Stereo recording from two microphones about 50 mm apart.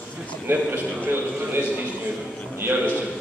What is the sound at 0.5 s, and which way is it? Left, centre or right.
A man's voice, right.